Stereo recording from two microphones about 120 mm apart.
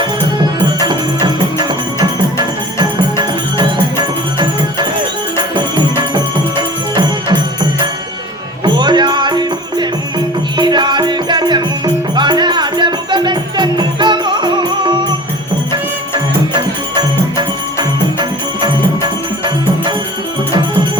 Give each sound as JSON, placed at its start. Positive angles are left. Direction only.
{"t": 0.8, "sound": "music", "side_deg": -35}
{"t": 6.6, "sound": "music", "side_deg": -35}